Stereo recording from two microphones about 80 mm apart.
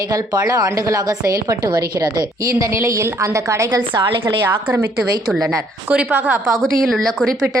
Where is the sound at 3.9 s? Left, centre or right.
Right.